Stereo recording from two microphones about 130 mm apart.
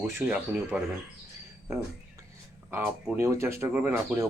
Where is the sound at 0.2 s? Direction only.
10° right (ahead or behind).